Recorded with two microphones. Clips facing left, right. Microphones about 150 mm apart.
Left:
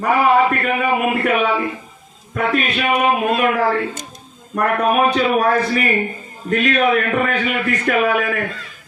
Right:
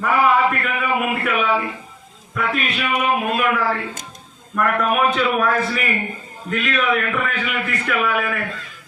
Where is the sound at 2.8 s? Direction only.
45° left (ahead or behind).